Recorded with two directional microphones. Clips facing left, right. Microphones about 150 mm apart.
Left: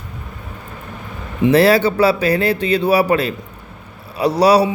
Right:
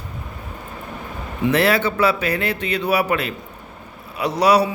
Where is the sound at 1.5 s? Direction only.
35° left (ahead or behind).